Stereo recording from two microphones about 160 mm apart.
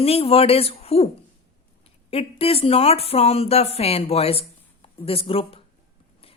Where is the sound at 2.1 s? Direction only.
40° left (ahead or behind).